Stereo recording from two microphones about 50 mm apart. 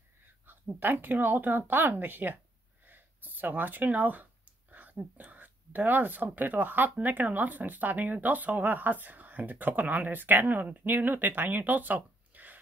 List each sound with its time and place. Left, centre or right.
0.7 s speech: right